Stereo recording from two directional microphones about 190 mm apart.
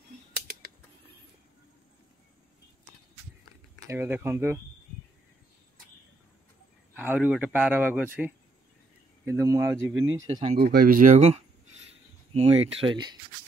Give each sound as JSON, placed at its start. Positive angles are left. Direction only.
{"t": 3.8, "sound": "speech", "side_deg": -10}
{"t": 7.0, "sound": "speech", "side_deg": -5}
{"t": 10.2, "sound": "speech", "side_deg": -25}
{"t": 10.6, "sound": "speech", "side_deg": -50}